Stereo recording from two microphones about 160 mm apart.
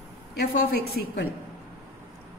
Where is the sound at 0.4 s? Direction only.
90° left.